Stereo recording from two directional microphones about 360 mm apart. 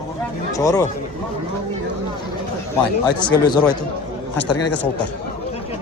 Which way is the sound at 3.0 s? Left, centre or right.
Centre.